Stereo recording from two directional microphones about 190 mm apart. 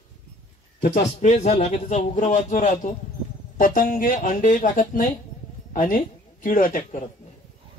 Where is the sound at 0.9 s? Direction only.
40° left (ahead or behind).